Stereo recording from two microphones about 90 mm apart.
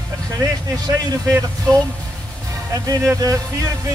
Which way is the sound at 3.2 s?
40° right (ahead or behind).